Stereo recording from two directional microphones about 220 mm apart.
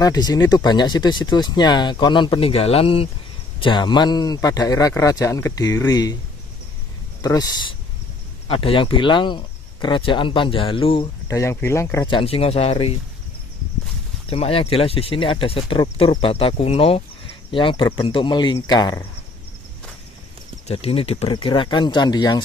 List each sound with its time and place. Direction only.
0.0 s speech: 15° left (ahead or behind)
7.2 s speech: 15° left (ahead or behind)
12.2 s speech: 25° left (ahead or behind)
14.3 s speech: 25° left (ahead or behind)
20.6 s speech: 25° left (ahead or behind)